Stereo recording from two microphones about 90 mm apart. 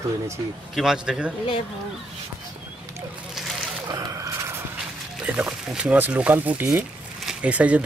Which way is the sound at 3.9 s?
40° right (ahead or behind).